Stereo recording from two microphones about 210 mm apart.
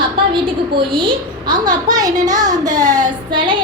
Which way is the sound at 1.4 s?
20° right (ahead or behind).